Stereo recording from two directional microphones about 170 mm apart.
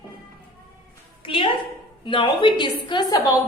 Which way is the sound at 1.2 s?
30° left (ahead or behind).